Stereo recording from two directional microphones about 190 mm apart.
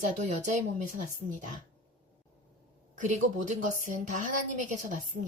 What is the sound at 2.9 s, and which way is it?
A woman's voice, 40° right (ahead or behind).